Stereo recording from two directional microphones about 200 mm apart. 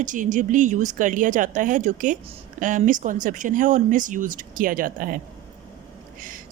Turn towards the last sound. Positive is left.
turn(degrees=-45)  # may be behind; listen again after turning